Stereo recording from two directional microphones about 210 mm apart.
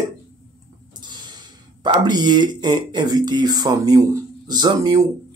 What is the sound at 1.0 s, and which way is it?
Speech, 20° right (ahead or behind).